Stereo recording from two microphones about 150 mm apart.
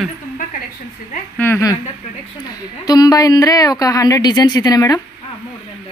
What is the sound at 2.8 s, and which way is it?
Speech, 25° left (ahead or behind).